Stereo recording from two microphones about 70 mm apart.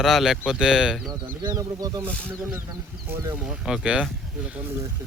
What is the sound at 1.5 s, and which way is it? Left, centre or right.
Speech, right.